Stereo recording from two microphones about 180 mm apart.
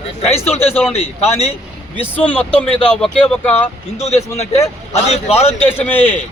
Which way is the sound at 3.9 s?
35° left (ahead or behind).